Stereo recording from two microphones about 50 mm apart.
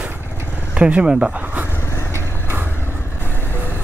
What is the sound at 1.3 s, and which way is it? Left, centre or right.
Vehicle, right.